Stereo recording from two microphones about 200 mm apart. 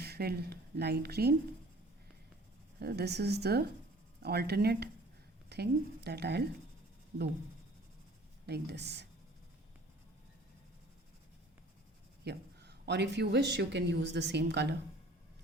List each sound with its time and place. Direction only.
0.0 s speech: 50° right (ahead or behind)
2.8 s speech: 55° right (ahead or behind)
8.4 s speech: 55° right (ahead or behind)
12.2 s speech: 55° right (ahead or behind)